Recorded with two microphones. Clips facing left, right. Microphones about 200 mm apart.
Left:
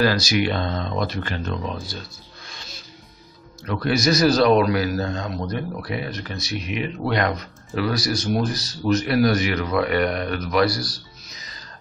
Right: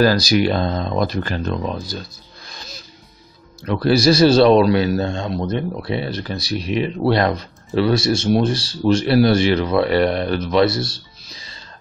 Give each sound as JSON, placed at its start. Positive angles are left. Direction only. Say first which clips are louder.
{"t": 0.0, "sound": "speech", "louder": "right 5 dB", "side_deg": -35}
{"t": 2.4, "sound": "music", "louder": "right 4 dB", "side_deg": -40}
{"t": 3.6, "sound": "a man's voice", "louder": "right 6 dB", "side_deg": -30}